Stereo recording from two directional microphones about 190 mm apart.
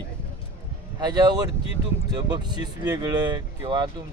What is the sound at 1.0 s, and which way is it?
Speech, 20° right (ahead or behind).